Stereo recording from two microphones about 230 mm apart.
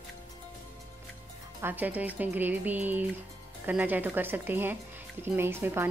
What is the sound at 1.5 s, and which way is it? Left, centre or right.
Speech, centre.